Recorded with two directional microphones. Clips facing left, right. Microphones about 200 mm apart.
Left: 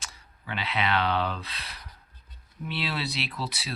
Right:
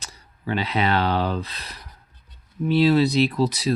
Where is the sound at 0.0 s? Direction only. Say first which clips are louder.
Right 11 dB; 40° right (ahead or behind).